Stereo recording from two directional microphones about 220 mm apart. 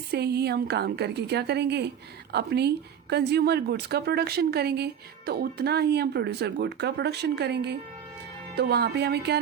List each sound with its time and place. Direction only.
0.1 s a woman's voice: 45° right (ahead or behind)